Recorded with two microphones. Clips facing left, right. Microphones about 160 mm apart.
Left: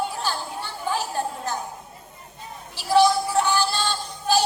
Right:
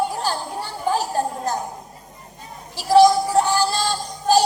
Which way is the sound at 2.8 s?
40° right (ahead or behind).